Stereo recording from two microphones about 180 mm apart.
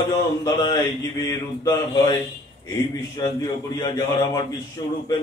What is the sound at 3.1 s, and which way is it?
Speech, 20° left (ahead or behind).